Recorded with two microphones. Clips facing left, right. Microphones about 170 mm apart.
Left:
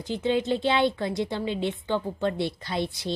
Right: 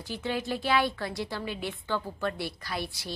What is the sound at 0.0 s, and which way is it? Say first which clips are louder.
A woman's voice: left 7 dB; 20° left (ahead or behind).